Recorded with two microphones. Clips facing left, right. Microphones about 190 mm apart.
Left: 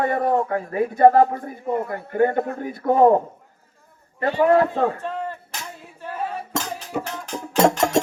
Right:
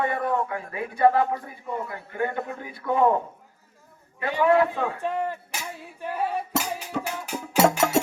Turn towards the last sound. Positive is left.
turn(degrees=-5)  # may be behind; listen again after turning